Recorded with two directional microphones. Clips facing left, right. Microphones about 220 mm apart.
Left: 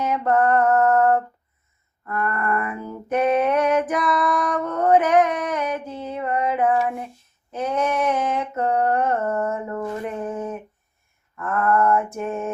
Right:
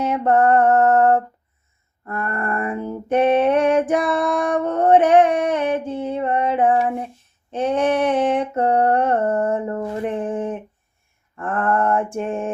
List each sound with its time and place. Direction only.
0.0 s a sound: 30° right (ahead or behind)
7.5 s female singing: 30° right (ahead or behind)
11.3 s mantra: 30° right (ahead or behind)